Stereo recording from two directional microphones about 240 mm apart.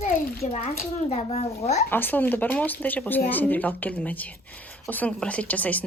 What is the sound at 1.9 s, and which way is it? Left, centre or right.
A woman's voice, centre.